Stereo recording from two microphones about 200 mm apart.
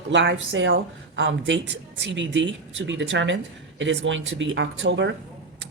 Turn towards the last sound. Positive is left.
turn(degrees=-65)  # may be behind; listen again after turning